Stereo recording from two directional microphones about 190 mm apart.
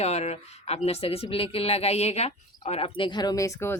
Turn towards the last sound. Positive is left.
turn(degrees=15)  # may be behind; listen again after turning